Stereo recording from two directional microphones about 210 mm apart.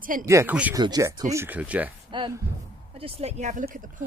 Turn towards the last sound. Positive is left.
turn(degrees=-40)  # may be behind; listen again after turning